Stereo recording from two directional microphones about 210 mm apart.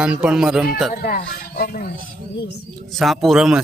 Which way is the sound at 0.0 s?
5° right (ahead or behind).